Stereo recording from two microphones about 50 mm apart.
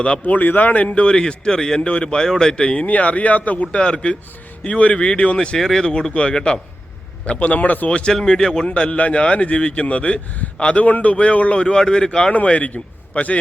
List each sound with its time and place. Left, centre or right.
0.0 s speech: left
1.0 s speech: centre
5.5 s speech: centre
8.6 s speech: left
12.3 s a man's voice: left